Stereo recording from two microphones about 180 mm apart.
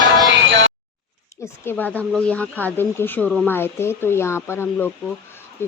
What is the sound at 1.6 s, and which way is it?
Speech, 10° left (ahead or behind).